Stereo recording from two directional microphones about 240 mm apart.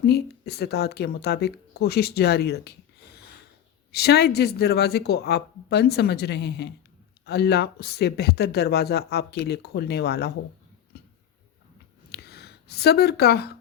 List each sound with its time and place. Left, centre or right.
0.0 s speech: left
3.9 s speech: left
12.1 s a sound: left